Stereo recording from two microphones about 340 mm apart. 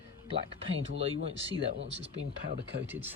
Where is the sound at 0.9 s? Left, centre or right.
Centre.